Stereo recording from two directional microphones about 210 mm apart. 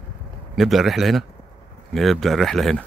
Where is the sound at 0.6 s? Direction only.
Centre (ahead or behind).